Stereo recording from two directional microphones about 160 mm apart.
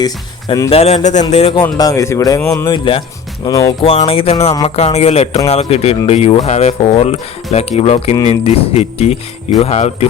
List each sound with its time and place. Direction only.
0.0 s speech: 25° left (ahead or behind)
0.7 s speech: 40° left (ahead or behind)
1.5 s speech: 20° left (ahead or behind)
2.6 s speech: 30° left (ahead or behind)
3.8 s speech: 35° left (ahead or behind)